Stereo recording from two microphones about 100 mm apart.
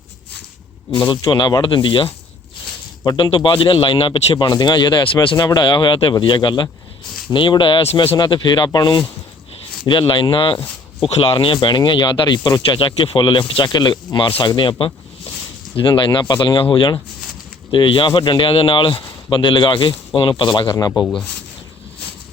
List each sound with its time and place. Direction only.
0.9 s speech: 50° left (ahead or behind)
3.0 s speech: 45° left (ahead or behind)
3.2 s speech: 55° left (ahead or behind)
4.4 s speech: 45° left (ahead or behind)
9.8 s speech: 55° left (ahead or behind)